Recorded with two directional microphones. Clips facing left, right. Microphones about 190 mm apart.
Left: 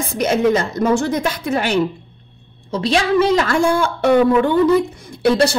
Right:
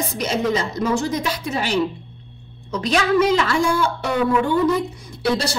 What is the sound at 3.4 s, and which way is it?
Speech, 55° left (ahead or behind).